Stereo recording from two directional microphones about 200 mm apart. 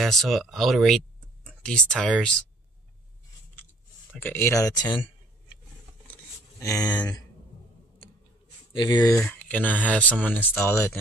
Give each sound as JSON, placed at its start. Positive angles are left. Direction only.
{"t": 0.0, "sound": "speech", "side_deg": 0}
{"t": 4.1, "sound": "speech", "side_deg": 10}
{"t": 6.6, "sound": "speech", "side_deg": 20}
{"t": 8.7, "sound": "speech", "side_deg": 20}